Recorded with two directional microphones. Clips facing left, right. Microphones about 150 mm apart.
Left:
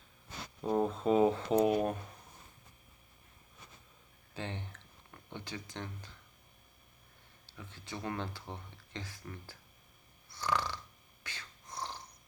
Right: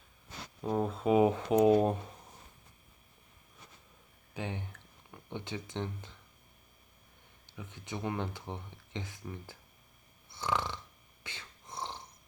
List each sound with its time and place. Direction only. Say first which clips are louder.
0.6 s speech: left 1 dB; centre (ahead or behind); by 1.7 s 15° right (ahead or behind)
1.7 s speech: right 5 dB; 25° right (ahead or behind)
4.4 s speech: right 2 dB; 10° right (ahead or behind)
7.4 s speech: right 4 dB; 20° right (ahead or behind)
10.2 s snoring: right 1 dB; 20° right (ahead or behind)
11.2 s a sound: right 1 dB; 25° right (ahead or behind)